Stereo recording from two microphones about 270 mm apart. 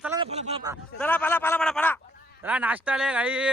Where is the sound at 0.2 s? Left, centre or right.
Centre.